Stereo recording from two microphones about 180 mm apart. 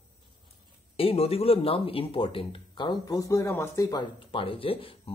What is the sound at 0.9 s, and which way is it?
Speech, 30° left (ahead or behind).